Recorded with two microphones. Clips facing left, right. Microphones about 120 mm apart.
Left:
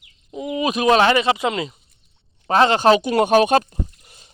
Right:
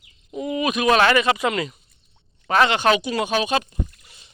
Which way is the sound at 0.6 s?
30° left (ahead or behind).